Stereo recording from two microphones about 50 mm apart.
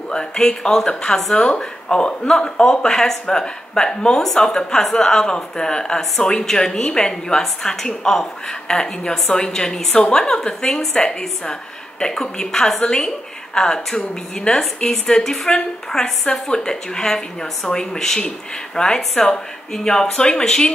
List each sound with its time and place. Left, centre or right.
0.1 s a woman's voice: centre
1.3 s a woman's voice: centre
19.1 s a woman's voice: centre